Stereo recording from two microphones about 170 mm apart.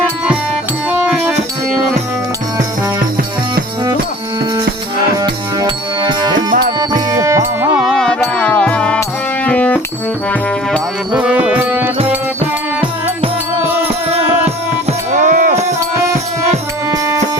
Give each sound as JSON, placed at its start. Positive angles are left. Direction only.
{"t": 0.9, "sound": "music", "side_deg": -10}
{"t": 5.1, "sound": "music", "side_deg": -25}
{"t": 7.9, "sound": "music", "side_deg": 0}
{"t": 10.7, "sound": "music", "side_deg": -5}
{"t": 14.1, "sound": "music", "side_deg": -35}
{"t": 15.1, "sound": "a sound", "side_deg": -50}